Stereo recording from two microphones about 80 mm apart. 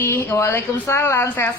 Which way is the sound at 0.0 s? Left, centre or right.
Left.